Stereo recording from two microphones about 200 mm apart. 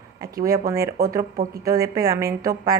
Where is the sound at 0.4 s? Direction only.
15° right (ahead or behind).